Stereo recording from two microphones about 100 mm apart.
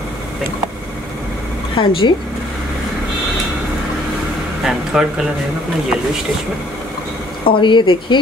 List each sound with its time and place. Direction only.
1.8 s speech: 55° left (ahead or behind)
4.6 s speech: 5° right (ahead or behind)
7.4 s speech: 55° left (ahead or behind)